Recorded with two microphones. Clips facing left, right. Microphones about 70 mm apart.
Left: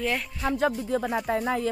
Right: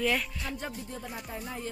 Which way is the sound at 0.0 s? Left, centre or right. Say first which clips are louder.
Left 2 dB; left.